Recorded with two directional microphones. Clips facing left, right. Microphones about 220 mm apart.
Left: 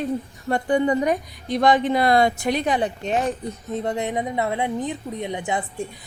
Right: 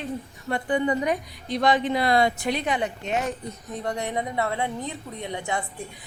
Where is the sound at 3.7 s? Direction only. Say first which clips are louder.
Left 4 dB; 20° left (ahead or behind).